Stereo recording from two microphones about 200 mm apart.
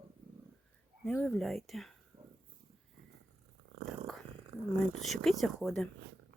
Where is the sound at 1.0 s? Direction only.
5° left (ahead or behind).